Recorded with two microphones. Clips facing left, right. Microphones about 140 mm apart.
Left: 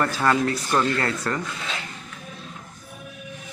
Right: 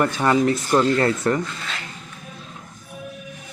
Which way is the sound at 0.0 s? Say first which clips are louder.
Right 3 dB; 15° right (ahead or behind).